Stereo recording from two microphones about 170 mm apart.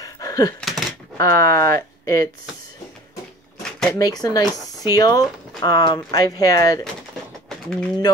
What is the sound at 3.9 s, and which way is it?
Speech, 20° left (ahead or behind).